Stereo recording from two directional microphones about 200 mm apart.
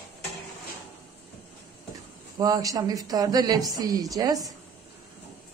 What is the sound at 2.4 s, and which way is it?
A man's voice, 20° right (ahead or behind).